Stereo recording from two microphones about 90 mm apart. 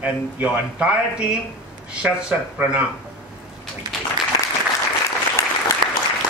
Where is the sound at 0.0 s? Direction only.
15° right (ahead or behind).